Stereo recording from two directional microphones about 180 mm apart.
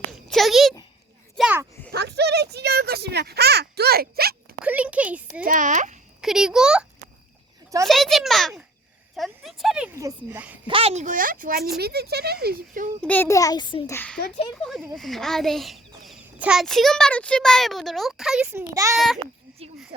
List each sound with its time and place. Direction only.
0.3 s a sound: centre (ahead or behind)
1.9 s a sound: 65° right (ahead or behind)
4.6 s a sound: 5° right (ahead or behind)
5.5 s a child's voice: 45° right (ahead or behind)
6.2 s a child's voice: 5° right (ahead or behind)
7.9 s a child's voice: centre (ahead or behind)
10.7 s a child's voice: 30° right (ahead or behind); by 12.9 s 50° right (ahead or behind)
13.0 s a child's voice: 10° left (ahead or behind); by 13.9 s 25° left (ahead or behind)
13.9 s a child's voice: 10° left (ahead or behind)
18.7 s speech: 20° right (ahead or behind)
18.9 s a child's voice: centre (ahead or behind)